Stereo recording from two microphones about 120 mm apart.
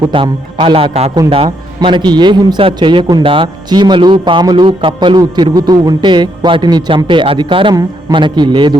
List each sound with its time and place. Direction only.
0.1 s a man's voice: 45° right (ahead or behind)
1.5 s a man's voice: 40° right (ahead or behind)